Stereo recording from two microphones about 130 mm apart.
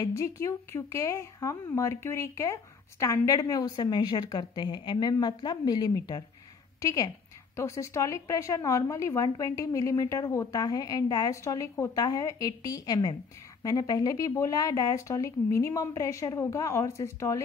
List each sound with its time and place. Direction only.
0.0 s a woman's voice: 25° left (ahead or behind)